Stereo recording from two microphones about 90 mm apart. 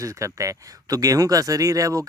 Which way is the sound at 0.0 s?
35° right (ahead or behind).